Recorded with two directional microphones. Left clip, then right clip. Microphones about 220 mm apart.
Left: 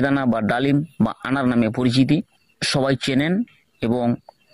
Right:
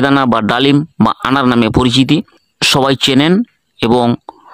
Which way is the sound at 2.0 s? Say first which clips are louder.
Right 7 dB; 60° right (ahead or behind).